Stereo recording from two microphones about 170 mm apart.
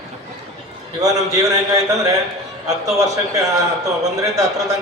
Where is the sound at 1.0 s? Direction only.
20° right (ahead or behind).